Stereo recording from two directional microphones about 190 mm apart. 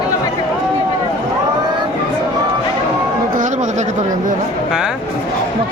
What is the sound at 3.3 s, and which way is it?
Speech, 40° right (ahead or behind).